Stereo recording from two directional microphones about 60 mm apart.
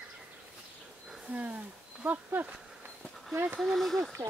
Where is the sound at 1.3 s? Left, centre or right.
Right.